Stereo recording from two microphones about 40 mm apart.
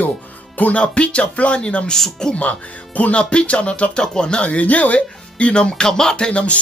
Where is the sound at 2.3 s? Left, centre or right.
Left.